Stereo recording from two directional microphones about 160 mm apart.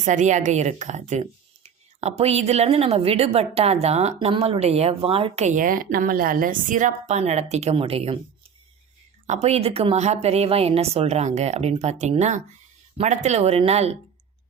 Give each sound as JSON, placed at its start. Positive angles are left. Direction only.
{"t": 0.0, "sound": "speech", "side_deg": -50}
{"t": 9.2, "sound": "a woman's voice", "side_deg": -45}